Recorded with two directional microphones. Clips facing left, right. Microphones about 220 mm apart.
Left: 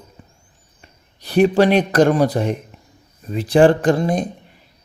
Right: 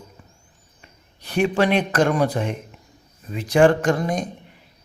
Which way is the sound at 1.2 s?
35° left (ahead or behind).